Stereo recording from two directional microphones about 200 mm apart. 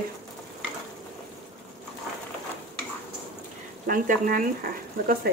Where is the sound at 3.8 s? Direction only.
45° right (ahead or behind).